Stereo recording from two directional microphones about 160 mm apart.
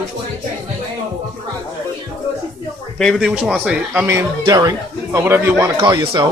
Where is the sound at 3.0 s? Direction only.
Centre (ahead or behind).